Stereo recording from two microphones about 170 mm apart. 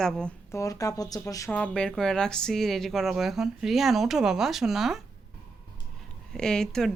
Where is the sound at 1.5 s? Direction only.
5° left (ahead or behind).